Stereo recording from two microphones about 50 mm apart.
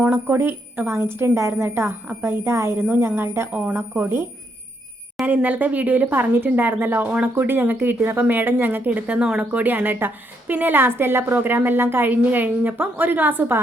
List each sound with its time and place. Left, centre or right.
0.0 s a woman's voice: right
3.5 s a woman's voice: right
5.2 s a woman's voice: right
12.1 s a woman's voice: right